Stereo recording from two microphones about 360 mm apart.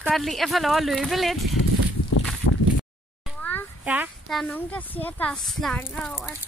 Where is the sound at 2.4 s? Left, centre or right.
Left.